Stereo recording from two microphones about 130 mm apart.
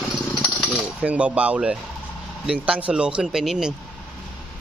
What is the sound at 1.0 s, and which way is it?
Speech, 10° right (ahead or behind).